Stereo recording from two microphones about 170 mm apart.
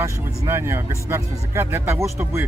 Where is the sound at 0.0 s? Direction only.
15° right (ahead or behind).